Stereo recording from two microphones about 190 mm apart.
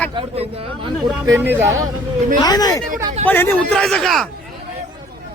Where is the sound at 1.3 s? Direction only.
10° right (ahead or behind).